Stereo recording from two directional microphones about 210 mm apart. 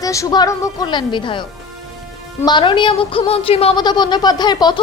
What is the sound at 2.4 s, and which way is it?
A woman's voice, 20° left (ahead or behind).